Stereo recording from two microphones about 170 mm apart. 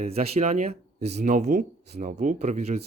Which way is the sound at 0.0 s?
40° right (ahead or behind).